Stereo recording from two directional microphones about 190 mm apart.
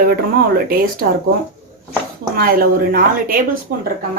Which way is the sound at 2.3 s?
50° right (ahead or behind).